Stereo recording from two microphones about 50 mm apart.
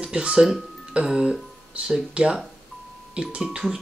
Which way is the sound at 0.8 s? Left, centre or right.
Centre.